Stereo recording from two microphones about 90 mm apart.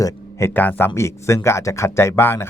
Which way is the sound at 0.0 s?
35° left (ahead or behind).